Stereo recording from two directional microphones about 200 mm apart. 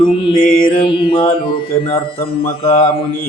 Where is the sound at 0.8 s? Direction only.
25° left (ahead or behind).